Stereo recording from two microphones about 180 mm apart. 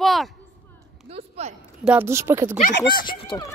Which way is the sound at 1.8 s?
10° right (ahead or behind).